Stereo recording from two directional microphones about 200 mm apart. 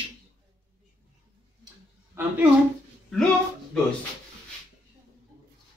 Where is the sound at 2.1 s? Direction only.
15° right (ahead or behind).